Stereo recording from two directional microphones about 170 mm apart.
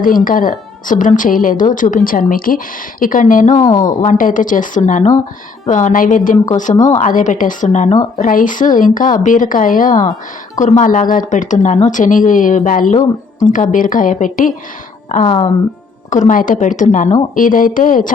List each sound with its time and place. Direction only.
0.0 s speech: 55° left (ahead or behind)
3.5 s a woman's voice: 25° left (ahead or behind)
4.0 s speech: 50° left (ahead or behind)